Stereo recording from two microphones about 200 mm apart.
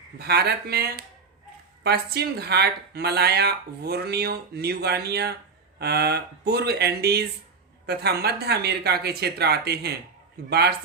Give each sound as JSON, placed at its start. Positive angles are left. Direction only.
{"t": 0.2, "sound": "speech", "side_deg": -55}